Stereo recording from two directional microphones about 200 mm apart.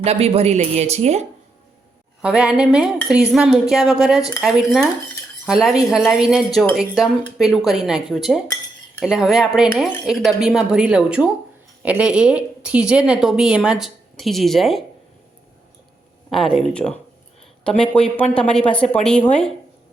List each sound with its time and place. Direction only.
0.0 s speech: 30° right (ahead or behind)
2.2 s a woman's voice: 5° right (ahead or behind)
16.3 s a woman's voice: centre (ahead or behind)